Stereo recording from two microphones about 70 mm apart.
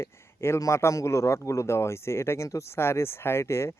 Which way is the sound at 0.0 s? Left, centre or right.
Left.